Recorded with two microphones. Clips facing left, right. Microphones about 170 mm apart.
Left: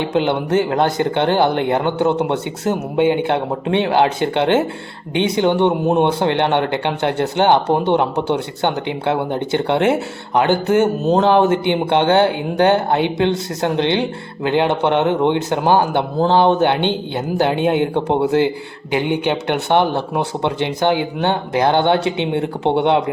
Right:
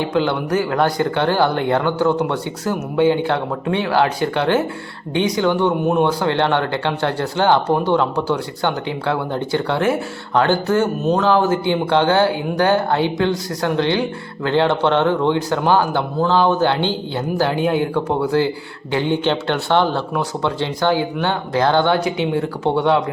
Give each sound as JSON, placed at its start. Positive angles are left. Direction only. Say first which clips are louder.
{"t": 0.0, "sound": "speech", "louder": "left 1 dB", "side_deg": 20}